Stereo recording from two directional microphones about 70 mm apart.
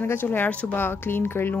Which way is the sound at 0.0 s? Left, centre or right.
Left.